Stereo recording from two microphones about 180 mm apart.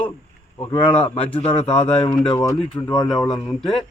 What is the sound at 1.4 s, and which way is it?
Speech, 25° left (ahead or behind).